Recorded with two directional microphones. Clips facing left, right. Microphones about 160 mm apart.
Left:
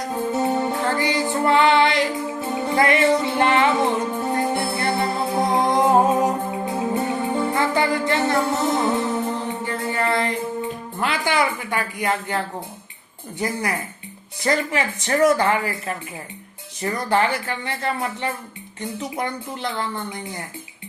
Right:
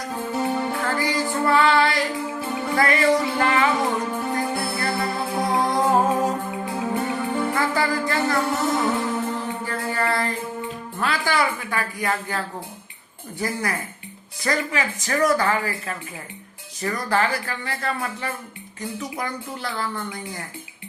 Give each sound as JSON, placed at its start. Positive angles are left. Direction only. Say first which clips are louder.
{"t": 0.1, "sound": "music", "louder": "left 3 dB", "side_deg": 25}
{"t": 11.0, "sound": "a woman's voice", "louder": "left 1 dB", "side_deg": 20}
{"t": 13.4, "sound": "speech", "louder": "left 2 dB", "side_deg": 20}